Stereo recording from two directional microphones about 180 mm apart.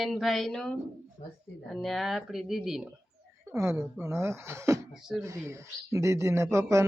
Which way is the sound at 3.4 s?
15° right (ahead or behind).